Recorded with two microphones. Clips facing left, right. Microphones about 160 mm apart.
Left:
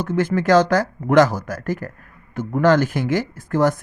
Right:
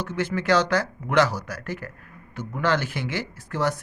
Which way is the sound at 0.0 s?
50° left (ahead or behind).